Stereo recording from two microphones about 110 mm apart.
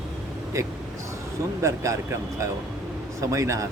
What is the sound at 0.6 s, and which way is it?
Speech, 25° right (ahead or behind).